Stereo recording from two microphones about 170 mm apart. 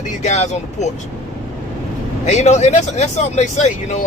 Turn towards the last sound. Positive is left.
turn(degrees=45)  # may be behind; listen again after turning